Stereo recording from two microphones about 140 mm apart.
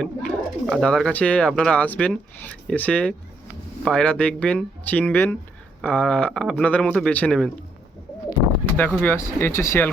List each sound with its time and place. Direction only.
0.0 s a man's voice: 5° left (ahead or behind)
8.6 s a sound: 15° left (ahead or behind)
9.0 s a man's voice: 15° left (ahead or behind)